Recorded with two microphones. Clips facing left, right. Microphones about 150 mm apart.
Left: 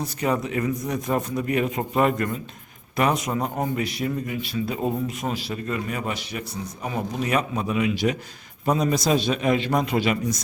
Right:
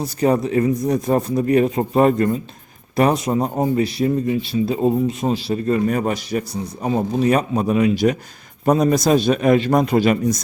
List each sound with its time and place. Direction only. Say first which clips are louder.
0.0 s a man's voice: right 7 dB; 35° right (ahead or behind)